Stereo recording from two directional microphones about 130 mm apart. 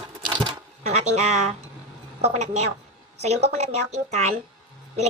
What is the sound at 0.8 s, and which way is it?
A woman's voice, 60° right (ahead or behind).